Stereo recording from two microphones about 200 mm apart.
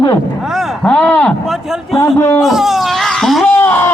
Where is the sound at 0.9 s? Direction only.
5° left (ahead or behind).